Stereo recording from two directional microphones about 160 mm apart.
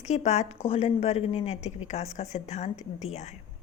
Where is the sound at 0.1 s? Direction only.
45° left (ahead or behind).